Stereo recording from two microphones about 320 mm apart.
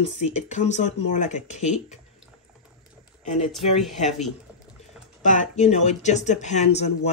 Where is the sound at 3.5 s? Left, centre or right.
Centre.